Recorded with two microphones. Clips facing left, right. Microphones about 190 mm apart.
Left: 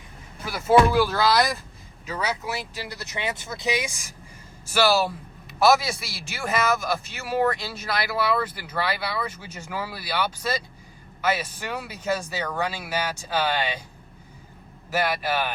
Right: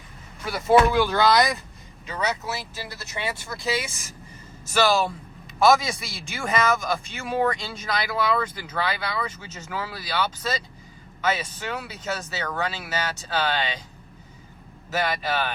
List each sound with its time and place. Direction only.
0.4 s speech: 5° left (ahead or behind)
14.8 s speech: 10° left (ahead or behind)